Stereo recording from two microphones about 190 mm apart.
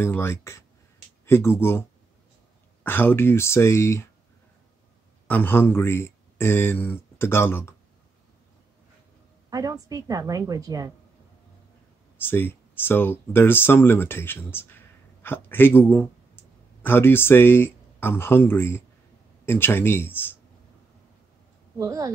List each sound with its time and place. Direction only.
0.0 s speech: 15° left (ahead or behind)
5.3 s speech: 10° left (ahead or behind)
9.5 s a woman's voice: 20° right (ahead or behind)
12.3 s speech: 10° left (ahead or behind)
21.7 s speech: 15° right (ahead or behind)